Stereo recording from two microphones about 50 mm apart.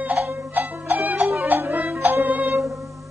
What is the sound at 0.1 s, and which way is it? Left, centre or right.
Music, right.